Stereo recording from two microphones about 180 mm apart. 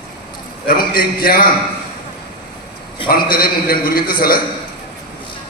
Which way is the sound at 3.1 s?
55° left (ahead or behind).